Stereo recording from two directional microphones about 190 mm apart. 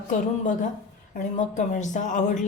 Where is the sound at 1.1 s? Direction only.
40° left (ahead or behind).